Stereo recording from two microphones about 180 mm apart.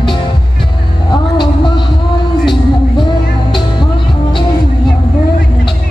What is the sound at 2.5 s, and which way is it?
Music, 25° left (ahead or behind).